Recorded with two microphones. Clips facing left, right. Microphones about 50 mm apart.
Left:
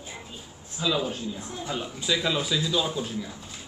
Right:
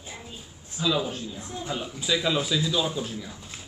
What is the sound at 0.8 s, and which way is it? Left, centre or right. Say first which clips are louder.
A man's voice: even; centre.